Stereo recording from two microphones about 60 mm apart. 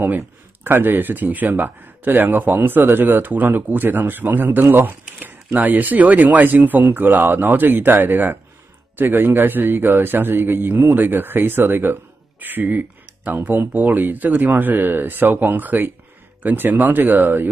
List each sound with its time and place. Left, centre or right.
0.7 s speech: right